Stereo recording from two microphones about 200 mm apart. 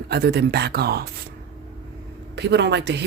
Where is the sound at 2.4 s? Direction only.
60° right (ahead or behind).